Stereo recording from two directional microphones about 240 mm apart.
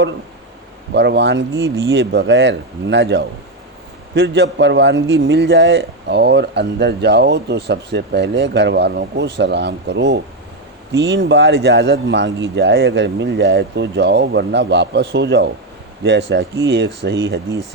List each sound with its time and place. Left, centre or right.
0.9 s speech: right